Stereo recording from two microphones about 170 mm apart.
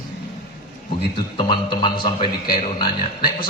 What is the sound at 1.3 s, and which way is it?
Speech, 30° left (ahead or behind).